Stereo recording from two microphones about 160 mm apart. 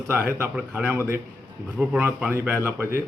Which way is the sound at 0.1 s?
15° right (ahead or behind).